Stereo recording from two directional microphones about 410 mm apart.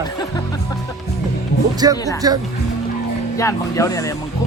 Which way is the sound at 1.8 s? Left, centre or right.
Centre.